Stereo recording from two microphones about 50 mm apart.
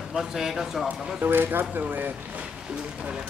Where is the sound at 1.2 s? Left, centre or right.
Right.